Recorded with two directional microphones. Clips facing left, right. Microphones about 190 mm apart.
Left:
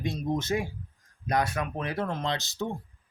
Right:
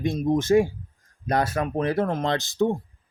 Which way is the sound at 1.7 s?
50° right (ahead or behind).